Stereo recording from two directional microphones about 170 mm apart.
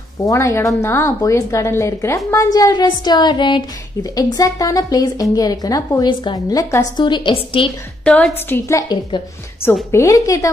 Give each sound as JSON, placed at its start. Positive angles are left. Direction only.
{"t": 0.2, "sound": "a woman's voice", "side_deg": 20}
{"t": 8.0, "sound": "a woman's voice", "side_deg": 5}